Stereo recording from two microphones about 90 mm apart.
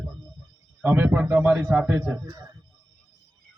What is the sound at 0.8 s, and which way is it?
A man's voice, 20° right (ahead or behind).